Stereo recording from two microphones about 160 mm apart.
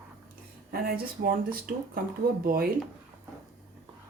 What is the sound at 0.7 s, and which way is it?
Speech, 70° right (ahead or behind).